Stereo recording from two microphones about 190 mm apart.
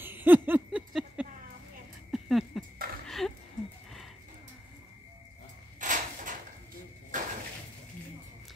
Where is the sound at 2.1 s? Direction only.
Centre (ahead or behind).